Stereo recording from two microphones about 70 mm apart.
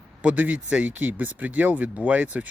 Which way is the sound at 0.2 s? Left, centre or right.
Right.